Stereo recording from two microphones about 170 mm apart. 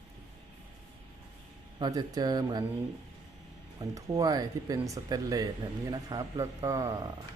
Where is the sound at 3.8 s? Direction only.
20° right (ahead or behind).